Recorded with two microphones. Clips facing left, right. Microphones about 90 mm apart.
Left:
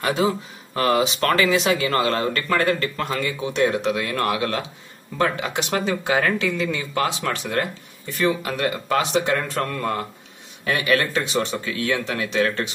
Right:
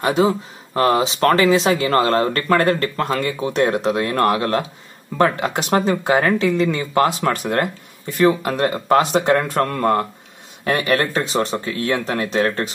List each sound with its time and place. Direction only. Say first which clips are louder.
0.0 s speech: right 4 dB; 30° right (ahead or behind)